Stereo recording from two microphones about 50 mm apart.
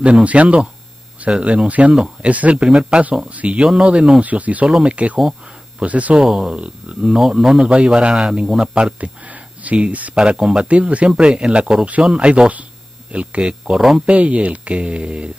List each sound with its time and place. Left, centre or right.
0.0 s speech: right
2.6 s speech: centre
4.2 s speech: right
6.2 s speech: centre; by 10.1 s right
10.1 s speech: centre
13.4 s speech: centre
14.0 s speech: right